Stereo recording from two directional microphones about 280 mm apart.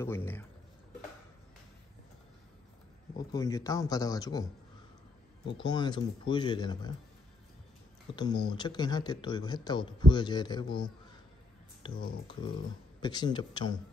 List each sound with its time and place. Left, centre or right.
0.0 s speech: centre
3.2 s speech: centre
5.6 s speech: centre
8.2 s speech: centre